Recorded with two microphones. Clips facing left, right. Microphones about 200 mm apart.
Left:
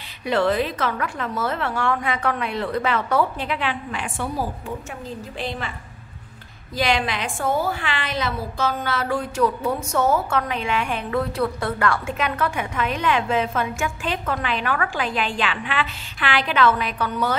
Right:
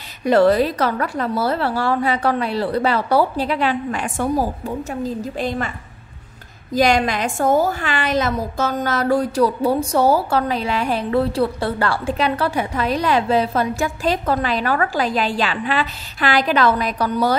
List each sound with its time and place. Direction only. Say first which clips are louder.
0.2 s a woman's voice: right 7 dB; 40° right (ahead or behind)
6.7 s a woman's voice: right 6 dB; 45° right (ahead or behind)